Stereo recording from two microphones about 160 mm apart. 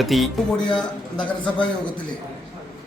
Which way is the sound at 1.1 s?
30° left (ahead or behind).